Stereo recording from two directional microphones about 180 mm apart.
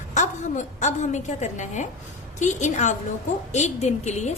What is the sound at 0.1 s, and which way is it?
A woman's voice, 40° left (ahead or behind).